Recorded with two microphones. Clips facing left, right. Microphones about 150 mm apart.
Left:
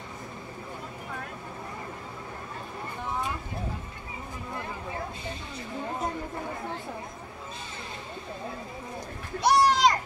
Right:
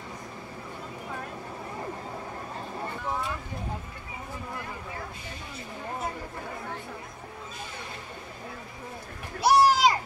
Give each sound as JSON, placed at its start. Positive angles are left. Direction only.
{"t": 9.4, "sound": "music", "side_deg": -5}